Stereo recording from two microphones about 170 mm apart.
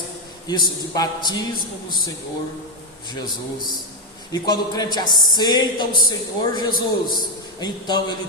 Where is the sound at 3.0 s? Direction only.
25° left (ahead or behind).